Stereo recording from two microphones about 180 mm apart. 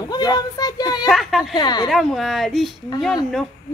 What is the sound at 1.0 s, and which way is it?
Speech, centre (ahead or behind).